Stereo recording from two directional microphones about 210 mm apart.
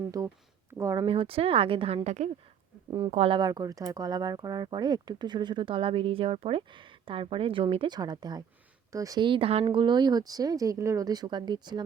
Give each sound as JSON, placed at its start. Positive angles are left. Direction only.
{"t": 0.7, "sound": "speech", "side_deg": -15}